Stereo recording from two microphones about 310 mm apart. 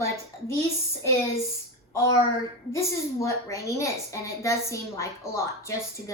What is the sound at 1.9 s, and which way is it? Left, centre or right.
A woman's voice, centre.